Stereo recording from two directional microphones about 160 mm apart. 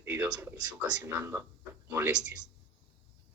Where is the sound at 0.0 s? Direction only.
20° right (ahead or behind).